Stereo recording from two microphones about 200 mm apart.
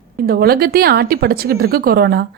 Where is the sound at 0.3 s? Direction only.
50° right (ahead or behind).